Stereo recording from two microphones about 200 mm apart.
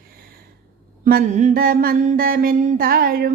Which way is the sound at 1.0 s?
45° right (ahead or behind).